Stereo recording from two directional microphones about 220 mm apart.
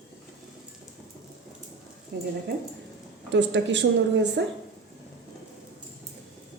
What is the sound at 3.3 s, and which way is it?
Speech, 55° right (ahead or behind).